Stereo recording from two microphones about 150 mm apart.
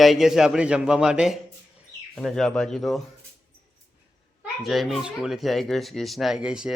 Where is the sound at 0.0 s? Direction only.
Centre (ahead or behind).